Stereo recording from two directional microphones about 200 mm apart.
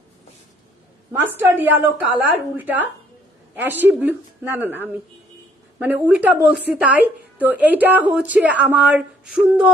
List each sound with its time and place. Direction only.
1.2 s a woman's voice: 10° right (ahead or behind)